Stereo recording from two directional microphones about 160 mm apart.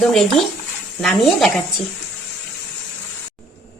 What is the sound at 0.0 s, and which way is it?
A woman's voice, centre (ahead or behind).